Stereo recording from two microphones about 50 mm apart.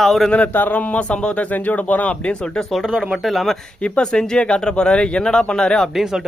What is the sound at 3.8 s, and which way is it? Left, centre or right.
Speech, centre.